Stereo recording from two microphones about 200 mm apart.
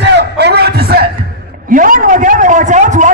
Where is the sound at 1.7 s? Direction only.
40° right (ahead or behind).